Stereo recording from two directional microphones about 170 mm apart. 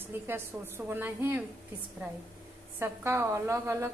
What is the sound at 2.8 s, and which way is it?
A woman's voice, 15° right (ahead or behind).